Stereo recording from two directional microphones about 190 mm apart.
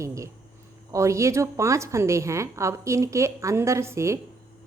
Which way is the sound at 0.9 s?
15° right (ahead or behind).